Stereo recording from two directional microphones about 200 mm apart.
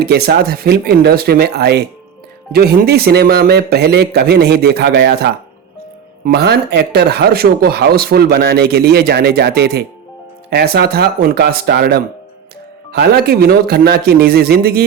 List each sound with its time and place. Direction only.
0.0 s speech: 50° right (ahead or behind)